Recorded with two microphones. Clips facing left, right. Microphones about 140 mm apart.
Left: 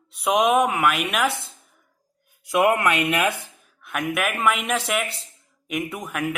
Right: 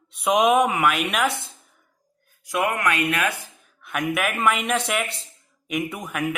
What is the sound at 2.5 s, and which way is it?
Speech, 20° left (ahead or behind).